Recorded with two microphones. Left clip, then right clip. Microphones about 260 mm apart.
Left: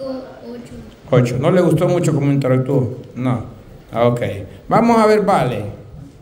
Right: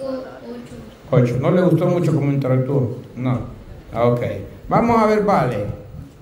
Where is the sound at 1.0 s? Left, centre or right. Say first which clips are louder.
Left 2 dB; centre.